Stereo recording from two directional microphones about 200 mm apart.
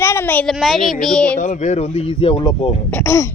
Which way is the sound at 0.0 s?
10° left (ahead or behind).